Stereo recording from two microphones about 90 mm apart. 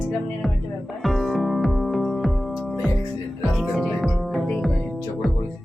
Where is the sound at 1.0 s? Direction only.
Centre (ahead or behind).